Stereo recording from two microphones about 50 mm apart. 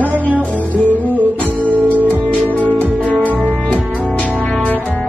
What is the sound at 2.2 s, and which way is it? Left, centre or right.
Music, left.